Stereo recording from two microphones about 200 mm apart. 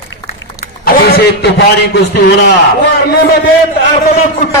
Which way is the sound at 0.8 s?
50° left (ahead or behind).